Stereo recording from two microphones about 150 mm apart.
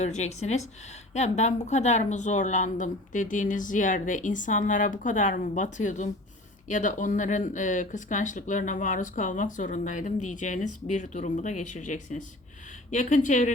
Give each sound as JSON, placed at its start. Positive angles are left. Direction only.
{"t": 0.0, "sound": "speech", "side_deg": 50}